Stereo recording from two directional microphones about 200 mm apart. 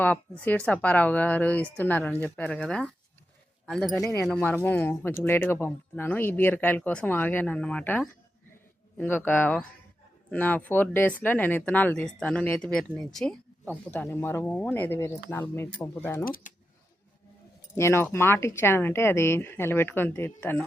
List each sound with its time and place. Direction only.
0.0 s speech: 10° left (ahead or behind)
16.2 s speech: 45° left (ahead or behind)
17.7 s speech: 15° left (ahead or behind)